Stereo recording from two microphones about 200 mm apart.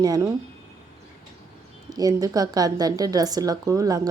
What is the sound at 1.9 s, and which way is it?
Speech, 20° right (ahead or behind).